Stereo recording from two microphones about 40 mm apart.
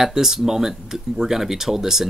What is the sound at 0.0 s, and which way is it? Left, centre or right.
Speech, centre.